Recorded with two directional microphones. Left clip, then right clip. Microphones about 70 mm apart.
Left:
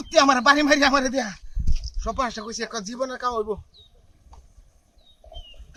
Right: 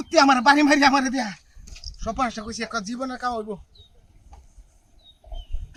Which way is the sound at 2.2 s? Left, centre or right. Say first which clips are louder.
Right 1 dB; centre.